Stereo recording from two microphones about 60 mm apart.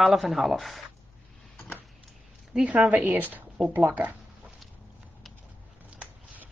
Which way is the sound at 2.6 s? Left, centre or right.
Right.